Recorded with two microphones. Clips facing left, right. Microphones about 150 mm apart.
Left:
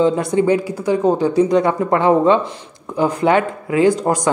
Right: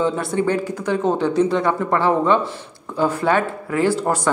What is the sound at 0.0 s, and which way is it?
Speech, 20° left (ahead or behind).